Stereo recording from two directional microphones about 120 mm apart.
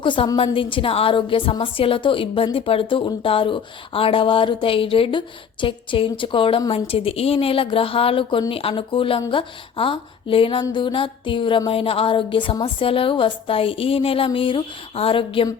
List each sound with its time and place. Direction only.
0.0 s a woman's voice: 45° left (ahead or behind)